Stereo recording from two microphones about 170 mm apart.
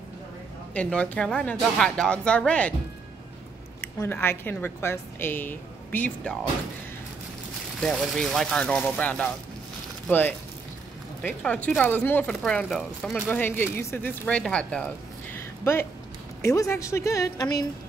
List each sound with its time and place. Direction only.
0.7 s speech: 5° left (ahead or behind)
3.8 s speech: 15° left (ahead or behind)
7.8 s speech: centre (ahead or behind)
15.3 s a sound: 15° left (ahead or behind)
16.4 s a woman's voice: 20° left (ahead or behind)